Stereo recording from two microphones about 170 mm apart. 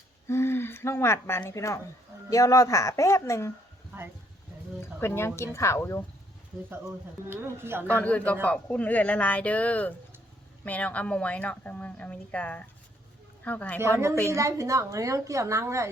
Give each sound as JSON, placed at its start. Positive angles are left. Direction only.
{"t": 0.3, "sound": "speech", "side_deg": 15}
{"t": 4.8, "sound": "speech", "side_deg": 15}
{"t": 7.3, "sound": "a woman's voice", "side_deg": -15}
{"t": 7.9, "sound": "speech", "side_deg": 10}
{"t": 13.7, "sound": "a woman's voice", "side_deg": -15}